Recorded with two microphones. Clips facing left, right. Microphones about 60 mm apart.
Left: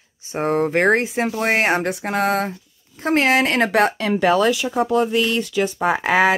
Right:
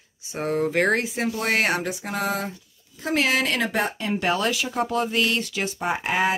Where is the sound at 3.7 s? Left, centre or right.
Left.